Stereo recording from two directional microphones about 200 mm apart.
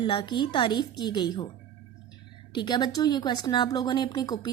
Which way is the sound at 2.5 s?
20° left (ahead or behind).